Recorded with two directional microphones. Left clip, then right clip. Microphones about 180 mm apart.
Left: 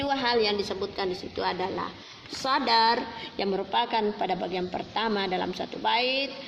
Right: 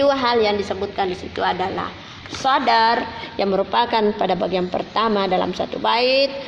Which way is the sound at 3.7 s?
30° right (ahead or behind).